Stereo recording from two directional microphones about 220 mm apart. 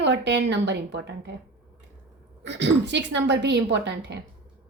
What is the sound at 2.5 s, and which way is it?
A woman's voice, 50° right (ahead or behind).